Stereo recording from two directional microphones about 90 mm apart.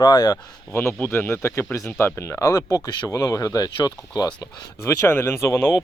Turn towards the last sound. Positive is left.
turn(degrees=30)  # may be behind; listen again after turning